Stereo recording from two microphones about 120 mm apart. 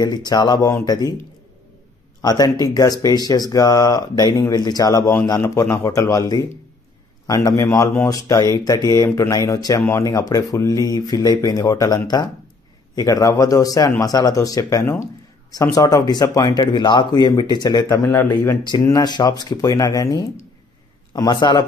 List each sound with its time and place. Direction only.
0.0 s speech: 30° left (ahead or behind)
2.2 s speech: 35° left (ahead or behind)
18.7 s speech: 35° left (ahead or behind)